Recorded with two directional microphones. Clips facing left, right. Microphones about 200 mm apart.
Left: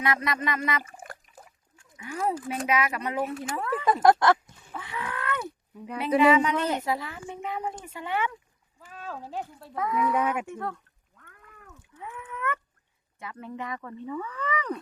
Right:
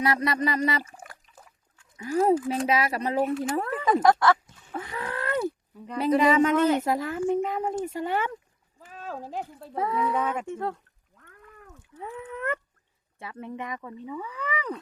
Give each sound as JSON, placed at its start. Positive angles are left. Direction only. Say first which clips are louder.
{"t": 0.0, "sound": "speech", "louder": "right 3 dB", "side_deg": -35}
{"t": 2.0, "sound": "speech", "louder": "right 8 dB", "side_deg": -40}
{"t": 3.8, "sound": "speech", "louder": "even", "side_deg": 10}
{"t": 4.8, "sound": "a sound", "louder": "right 2 dB", "side_deg": -40}
{"t": 6.1, "sound": "speech", "louder": "even", "side_deg": -40}
{"t": 9.7, "sound": "speech", "louder": "even", "side_deg": -30}
{"t": 11.9, "sound": "a sound", "louder": "right 3 dB", "side_deg": -35}
{"t": 13.1, "sound": "speech", "louder": "right 1 dB", "side_deg": -25}